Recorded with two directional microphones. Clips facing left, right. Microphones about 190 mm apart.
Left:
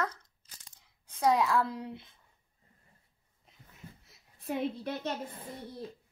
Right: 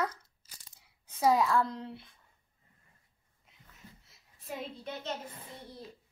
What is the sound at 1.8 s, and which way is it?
Speech, 15° left (ahead or behind).